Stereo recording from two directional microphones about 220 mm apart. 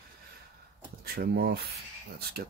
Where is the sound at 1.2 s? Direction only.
45° right (ahead or behind).